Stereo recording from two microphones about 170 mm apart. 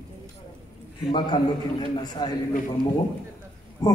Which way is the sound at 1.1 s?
25° left (ahead or behind).